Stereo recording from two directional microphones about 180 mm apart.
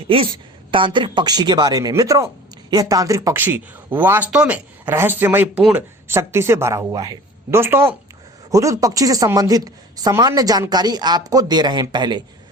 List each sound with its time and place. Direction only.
0.1 s a woman's voice: 30° right (ahead or behind)